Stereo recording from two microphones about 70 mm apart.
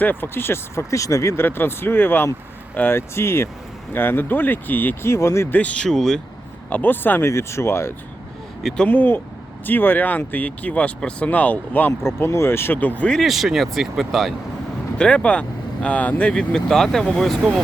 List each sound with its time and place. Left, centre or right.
0.0 s speech: left
1.5 s speech: left
5.5 s speech: centre
6.7 s speech: left
13.2 s speech: centre
14.9 s speech: centre